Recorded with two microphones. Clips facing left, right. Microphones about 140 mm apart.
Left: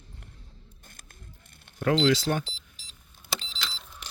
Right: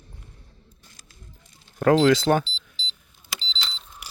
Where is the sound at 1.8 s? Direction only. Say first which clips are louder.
Right 6 dB; 55° right (ahead or behind).